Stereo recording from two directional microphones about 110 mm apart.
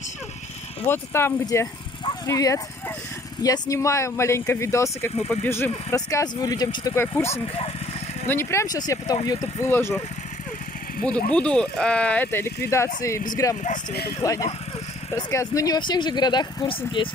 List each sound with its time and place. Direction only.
0.8 s speech: 20° left (ahead or behind); by 7.0 s 35° left (ahead or behind)
7.2 s speech: 65° left (ahead or behind)
8.3 s speech: 25° left (ahead or behind)
8.6 s speech: 35° left (ahead or behind)
9.7 s speech: 20° left (ahead or behind)
11.1 s speech: 10° left (ahead or behind); by 17.1 s 50° left (ahead or behind)